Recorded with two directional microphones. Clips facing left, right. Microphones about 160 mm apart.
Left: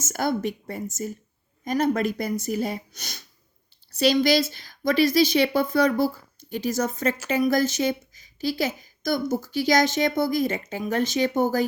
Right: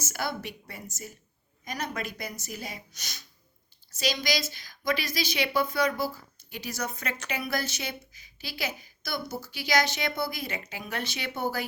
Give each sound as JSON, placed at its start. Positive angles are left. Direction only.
{"t": 0.0, "sound": "a woman's voice", "side_deg": 50}